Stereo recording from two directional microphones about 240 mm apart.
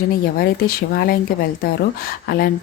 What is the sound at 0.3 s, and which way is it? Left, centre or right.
Speech, left.